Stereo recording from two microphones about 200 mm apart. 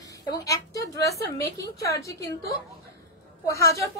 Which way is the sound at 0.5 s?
15° left (ahead or behind).